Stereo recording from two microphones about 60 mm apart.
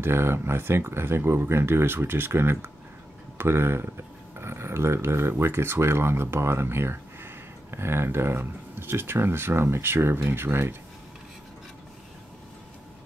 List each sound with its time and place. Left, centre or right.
0.0 s speech: right